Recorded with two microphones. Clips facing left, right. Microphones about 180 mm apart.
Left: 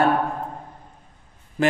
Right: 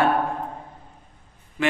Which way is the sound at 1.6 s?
40° left (ahead or behind).